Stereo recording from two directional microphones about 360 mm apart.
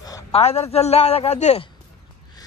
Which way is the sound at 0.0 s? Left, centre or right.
Centre.